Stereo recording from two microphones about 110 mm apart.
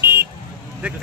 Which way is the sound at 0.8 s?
10° right (ahead or behind).